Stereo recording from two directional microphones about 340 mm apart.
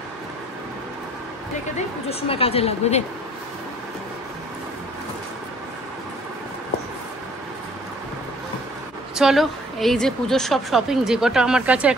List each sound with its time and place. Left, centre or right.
2.0 s a woman's voice: centre
9.1 s a woman's voice: centre